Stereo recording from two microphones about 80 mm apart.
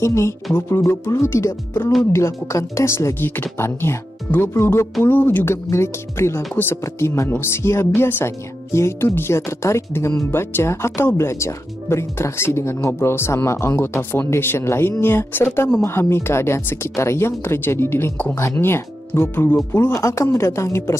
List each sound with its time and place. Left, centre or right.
0.0 s speech: left
3.2 s speech: left
18.1 s speech: centre
18.6 s speech: left